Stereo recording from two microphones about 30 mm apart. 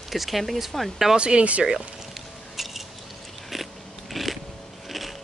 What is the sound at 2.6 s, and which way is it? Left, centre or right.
Squish, centre.